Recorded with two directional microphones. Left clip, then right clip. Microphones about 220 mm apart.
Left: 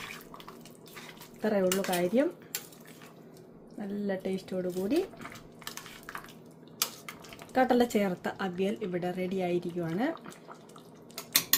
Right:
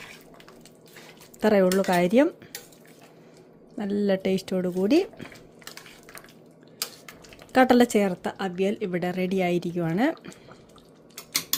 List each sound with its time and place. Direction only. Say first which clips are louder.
1.4 s speech: right 8 dB; 40° right (ahead or behind)
3.8 s speech: right 10 dB; 40° right (ahead or behind)
6.7 s a sound: left 1 dB; 5° left (ahead or behind)
7.5 s speech: right 7 dB; 35° right (ahead or behind)